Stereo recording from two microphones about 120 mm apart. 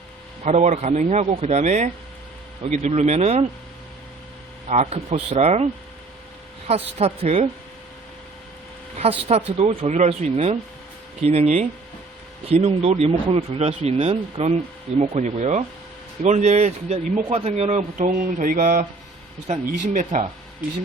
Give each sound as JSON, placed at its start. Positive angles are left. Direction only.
{"t": 0.4, "sound": "speech", "side_deg": -70}
{"t": 2.6, "sound": "speech", "side_deg": -70}
{"t": 4.7, "sound": "speech", "side_deg": -60}
{"t": 6.7, "sound": "speech", "side_deg": -55}
{"t": 9.0, "sound": "speech", "side_deg": -60}
{"t": 15.2, "sound": "speech", "side_deg": -90}
{"t": 16.2, "sound": "speech", "side_deg": -70}